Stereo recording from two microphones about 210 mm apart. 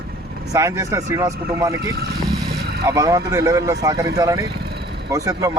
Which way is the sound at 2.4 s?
50° right (ahead or behind).